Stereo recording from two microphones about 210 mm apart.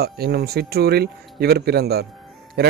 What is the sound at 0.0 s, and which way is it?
Speech, 50° right (ahead or behind).